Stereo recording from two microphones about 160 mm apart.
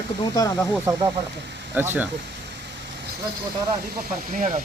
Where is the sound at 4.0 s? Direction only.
55° right (ahead or behind).